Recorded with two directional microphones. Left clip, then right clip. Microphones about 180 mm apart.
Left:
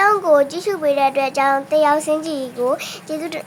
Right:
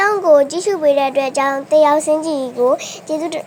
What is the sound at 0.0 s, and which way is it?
A woman's voice, 10° right (ahead or behind).